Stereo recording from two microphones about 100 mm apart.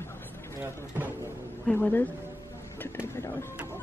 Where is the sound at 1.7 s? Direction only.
20° left (ahead or behind).